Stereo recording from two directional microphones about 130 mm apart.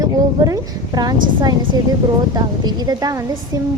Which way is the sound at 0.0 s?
25° right (ahead or behind).